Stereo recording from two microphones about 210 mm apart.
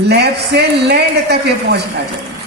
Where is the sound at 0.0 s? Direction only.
50° right (ahead or behind).